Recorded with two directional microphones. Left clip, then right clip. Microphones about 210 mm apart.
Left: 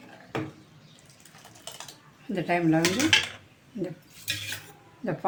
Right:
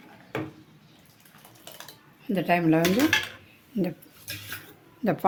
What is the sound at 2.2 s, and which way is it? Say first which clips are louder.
Speech: right 2 dB; 40° right (ahead or behind).